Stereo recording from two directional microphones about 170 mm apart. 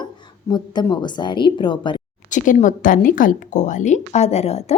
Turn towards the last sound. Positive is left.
turn(degrees=35)  # may be behind; listen again after turning